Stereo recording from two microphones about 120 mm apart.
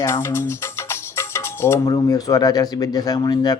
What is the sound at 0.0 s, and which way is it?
Music, 20° left (ahead or behind).